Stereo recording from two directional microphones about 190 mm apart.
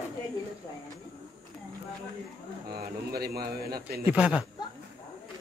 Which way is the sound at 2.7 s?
55° right (ahead or behind).